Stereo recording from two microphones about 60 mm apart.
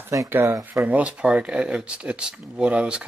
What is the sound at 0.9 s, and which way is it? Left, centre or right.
Speech, right.